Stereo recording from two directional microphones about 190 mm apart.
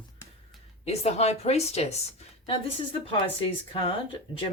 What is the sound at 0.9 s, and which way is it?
Speech, 35° left (ahead or behind).